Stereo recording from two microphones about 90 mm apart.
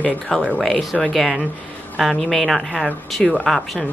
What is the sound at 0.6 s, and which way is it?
Speech, 5° left (ahead or behind).